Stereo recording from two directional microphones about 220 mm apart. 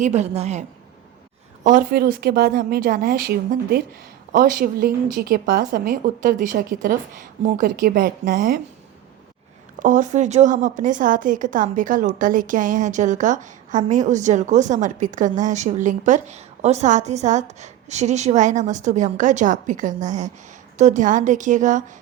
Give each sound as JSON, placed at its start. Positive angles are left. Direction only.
{"t": 0.0, "sound": "a woman's voice", "side_deg": -30}
{"t": 1.6, "sound": "a woman's voice", "side_deg": -35}
{"t": 9.8, "sound": "a woman's voice", "side_deg": -35}